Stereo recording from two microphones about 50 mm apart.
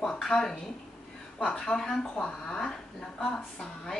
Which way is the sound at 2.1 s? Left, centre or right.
Left.